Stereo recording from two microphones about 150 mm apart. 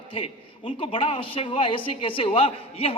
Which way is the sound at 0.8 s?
35° left (ahead or behind).